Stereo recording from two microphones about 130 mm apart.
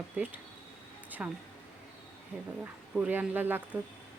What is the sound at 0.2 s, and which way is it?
Speech, 10° right (ahead or behind).